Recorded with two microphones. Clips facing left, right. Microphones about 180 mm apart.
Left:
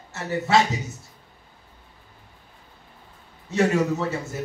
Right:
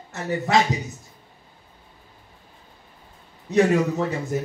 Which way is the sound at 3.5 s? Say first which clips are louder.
Right 2 dB; 15° right (ahead or behind).